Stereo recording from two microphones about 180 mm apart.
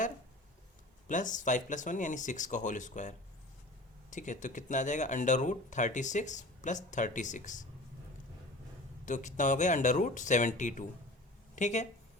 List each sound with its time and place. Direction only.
1.0 s speech: 45° left (ahead or behind)
9.0 s speech: 45° left (ahead or behind)